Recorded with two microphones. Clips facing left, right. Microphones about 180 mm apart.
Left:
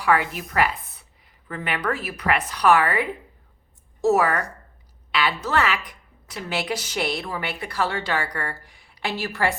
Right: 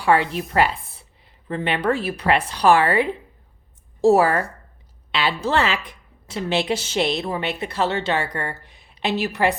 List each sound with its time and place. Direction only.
0.0 s a woman's voice: 30° right (ahead or behind)